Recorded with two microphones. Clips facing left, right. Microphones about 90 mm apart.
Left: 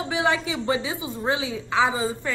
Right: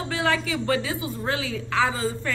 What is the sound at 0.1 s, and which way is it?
A woman's voice, 20° left (ahead or behind).